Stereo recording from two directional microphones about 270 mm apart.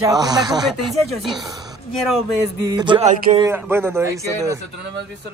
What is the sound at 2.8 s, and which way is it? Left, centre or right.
Speech, centre.